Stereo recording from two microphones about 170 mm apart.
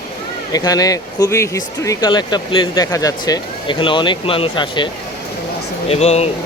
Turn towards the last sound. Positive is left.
turn(degrees=40)  # may be behind; listen again after turning